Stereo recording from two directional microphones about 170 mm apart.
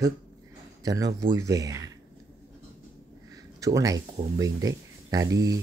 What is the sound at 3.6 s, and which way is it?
Speech, 20° right (ahead or behind).